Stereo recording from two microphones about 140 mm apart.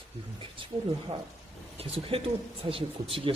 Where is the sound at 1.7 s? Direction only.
40° right (ahead or behind).